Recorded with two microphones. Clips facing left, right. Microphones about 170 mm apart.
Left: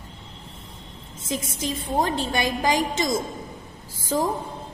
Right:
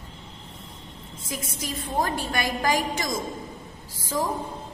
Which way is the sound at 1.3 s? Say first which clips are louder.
Left 5 dB; 20° left (ahead or behind).